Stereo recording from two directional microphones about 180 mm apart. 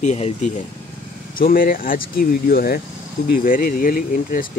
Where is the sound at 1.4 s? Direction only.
55° left (ahead or behind).